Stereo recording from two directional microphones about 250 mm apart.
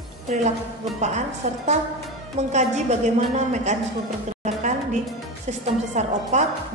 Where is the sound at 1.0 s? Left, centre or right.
Right.